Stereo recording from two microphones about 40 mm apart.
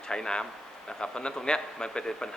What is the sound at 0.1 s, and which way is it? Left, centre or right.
A man's voice, centre.